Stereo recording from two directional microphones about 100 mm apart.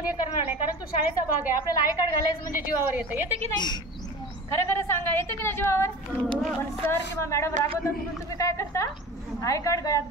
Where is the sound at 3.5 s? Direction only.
45° left (ahead or behind).